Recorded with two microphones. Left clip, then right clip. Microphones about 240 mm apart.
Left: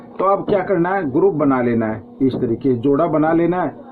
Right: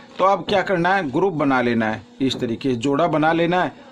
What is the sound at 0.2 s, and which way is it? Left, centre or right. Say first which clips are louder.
A man's voice: left 1 dB; right.